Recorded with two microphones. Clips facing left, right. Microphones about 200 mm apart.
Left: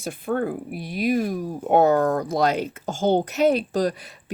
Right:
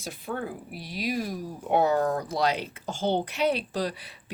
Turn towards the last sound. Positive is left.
turn(degrees=45)  # may be behind; listen again after turning